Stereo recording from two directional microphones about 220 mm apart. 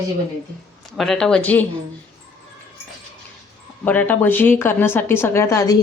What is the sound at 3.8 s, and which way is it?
A woman's voice, 5° left (ahead or behind).